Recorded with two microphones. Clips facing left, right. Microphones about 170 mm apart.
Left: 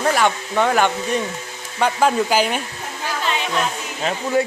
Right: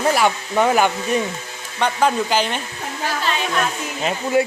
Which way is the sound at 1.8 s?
5° left (ahead or behind).